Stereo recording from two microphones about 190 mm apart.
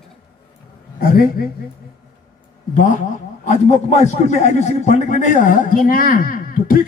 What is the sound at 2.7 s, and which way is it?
A man's voice, 45° left (ahead or behind).